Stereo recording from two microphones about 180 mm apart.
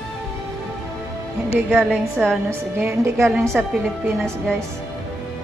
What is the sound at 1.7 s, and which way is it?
Speech, 5° right (ahead or behind).